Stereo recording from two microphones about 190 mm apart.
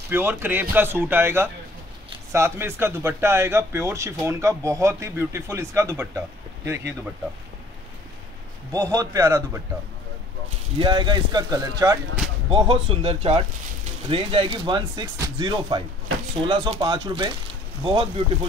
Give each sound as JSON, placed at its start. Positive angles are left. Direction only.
{"t": 0.1, "sound": "a man's voice", "side_deg": -10}
{"t": 8.7, "sound": "a man's voice", "side_deg": -15}
{"t": 10.8, "sound": "speech", "side_deg": -25}